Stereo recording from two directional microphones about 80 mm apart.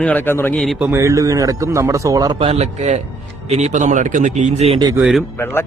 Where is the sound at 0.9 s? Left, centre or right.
Right.